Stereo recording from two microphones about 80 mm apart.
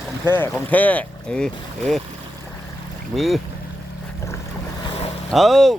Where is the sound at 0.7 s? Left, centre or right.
Centre.